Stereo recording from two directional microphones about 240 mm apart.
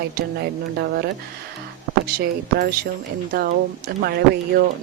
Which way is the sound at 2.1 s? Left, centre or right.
Right.